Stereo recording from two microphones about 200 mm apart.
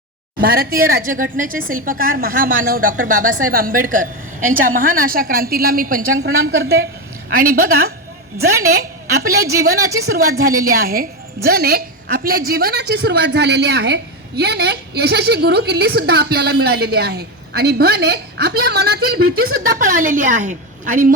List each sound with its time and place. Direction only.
0.4 s a woman's voice: 50° right (ahead or behind)